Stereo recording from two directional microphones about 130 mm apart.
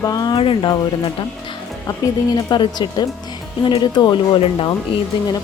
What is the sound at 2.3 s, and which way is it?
Speech, 35° left (ahead or behind).